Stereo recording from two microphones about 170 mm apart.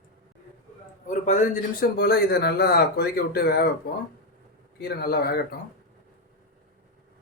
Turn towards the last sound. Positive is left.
turn(degrees=65)  # may be behind; listen again after turning